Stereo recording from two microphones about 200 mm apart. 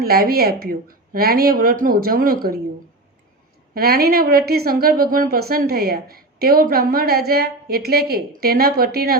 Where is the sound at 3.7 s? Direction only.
50° right (ahead or behind).